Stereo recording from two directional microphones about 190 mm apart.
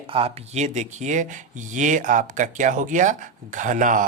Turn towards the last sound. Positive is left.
turn(degrees=-40)  # may be behind; listen again after turning